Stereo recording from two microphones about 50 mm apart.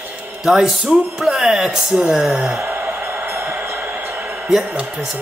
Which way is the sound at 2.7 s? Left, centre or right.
Right.